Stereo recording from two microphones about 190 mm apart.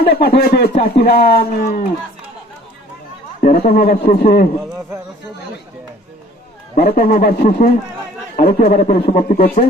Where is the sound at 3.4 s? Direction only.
45° left (ahead or behind).